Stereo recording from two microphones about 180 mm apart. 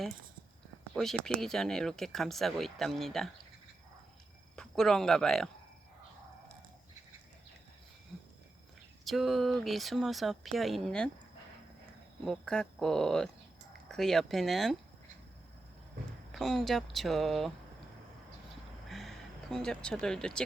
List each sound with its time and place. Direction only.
0.9 s speech: centre (ahead or behind)
4.5 s speech: 5° left (ahead or behind)
9.0 s speech: centre (ahead or behind)
12.2 s speech: 5° left (ahead or behind)
16.3 s speech: centre (ahead or behind)
18.9 s a sound: centre (ahead or behind)